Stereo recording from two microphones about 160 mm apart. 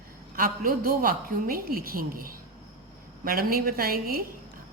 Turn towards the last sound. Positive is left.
turn(degrees=-65)  # may be behind; listen again after turning